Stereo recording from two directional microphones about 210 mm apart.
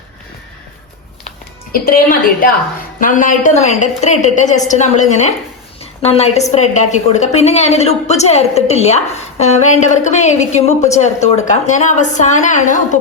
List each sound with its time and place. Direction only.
1.7 s a woman's voice: 45° left (ahead or behind)